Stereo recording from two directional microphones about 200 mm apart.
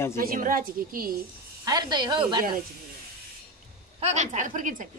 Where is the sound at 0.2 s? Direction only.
45° right (ahead or behind).